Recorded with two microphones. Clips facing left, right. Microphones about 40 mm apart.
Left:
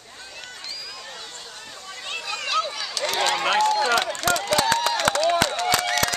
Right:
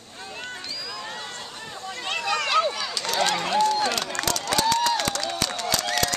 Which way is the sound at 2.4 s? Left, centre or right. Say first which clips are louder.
Right 2 dB; centre.